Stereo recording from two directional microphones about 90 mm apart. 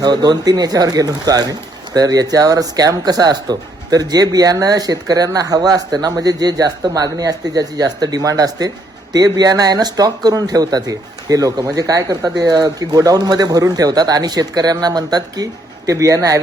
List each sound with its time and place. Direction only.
0.0 s speech: 50° right (ahead or behind)